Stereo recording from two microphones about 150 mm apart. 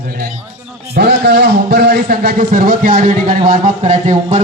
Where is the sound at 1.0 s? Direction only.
90° right.